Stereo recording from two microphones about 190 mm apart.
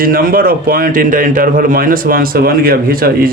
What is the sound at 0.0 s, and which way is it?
A man's voice, 50° right (ahead or behind).